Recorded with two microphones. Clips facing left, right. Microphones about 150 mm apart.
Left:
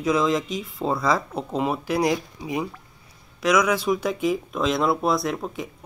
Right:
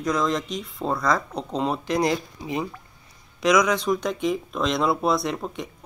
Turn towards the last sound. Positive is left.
turn(degrees=0)  # may be behind; listen again after turning